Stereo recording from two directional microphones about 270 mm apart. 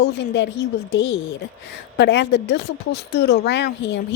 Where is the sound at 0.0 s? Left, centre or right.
Left.